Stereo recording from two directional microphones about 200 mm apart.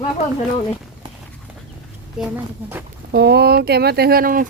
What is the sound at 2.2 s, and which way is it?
Speech, 5° right (ahead or behind).